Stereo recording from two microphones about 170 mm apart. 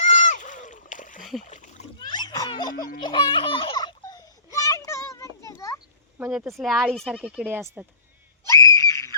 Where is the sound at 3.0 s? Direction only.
30° left (ahead or behind).